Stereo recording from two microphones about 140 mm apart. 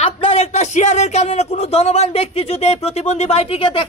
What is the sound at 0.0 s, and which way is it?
Speech, 45° left (ahead or behind).